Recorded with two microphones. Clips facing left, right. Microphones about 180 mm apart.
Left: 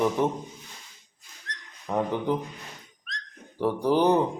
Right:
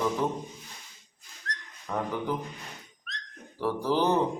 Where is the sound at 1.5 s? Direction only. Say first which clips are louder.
Left 3 dB; 20° left (ahead or behind).